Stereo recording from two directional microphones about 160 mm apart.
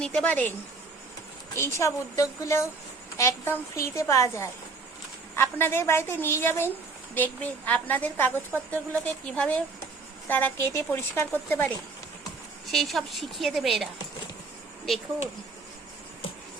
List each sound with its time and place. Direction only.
0.0 s a woman's voice: 5° left (ahead or behind)
1.5 s a woman's voice: 15° left (ahead or behind)
12.7 s speech: centre (ahead or behind)